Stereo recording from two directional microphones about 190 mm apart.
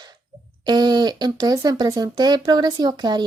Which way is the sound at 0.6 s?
20° right (ahead or behind).